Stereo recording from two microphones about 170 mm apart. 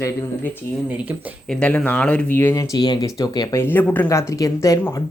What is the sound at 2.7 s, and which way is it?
Speech, 25° left (ahead or behind).